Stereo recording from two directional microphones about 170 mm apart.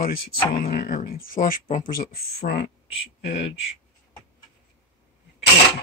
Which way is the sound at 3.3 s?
90° left.